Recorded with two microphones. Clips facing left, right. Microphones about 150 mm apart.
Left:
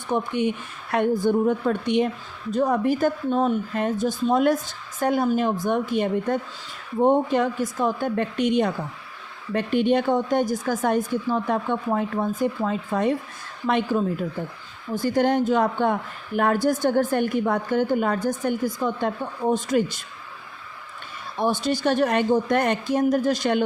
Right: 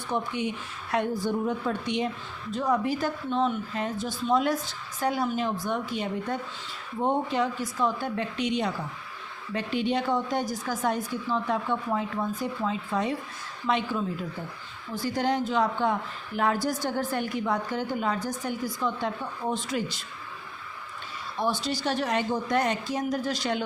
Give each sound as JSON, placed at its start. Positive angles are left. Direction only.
{"t": 0.1, "sound": "a woman's voice", "side_deg": 55}
{"t": 21.4, "sound": "a woman's voice", "side_deg": 50}